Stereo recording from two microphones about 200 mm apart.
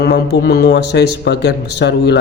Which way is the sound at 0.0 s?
55° left (ahead or behind).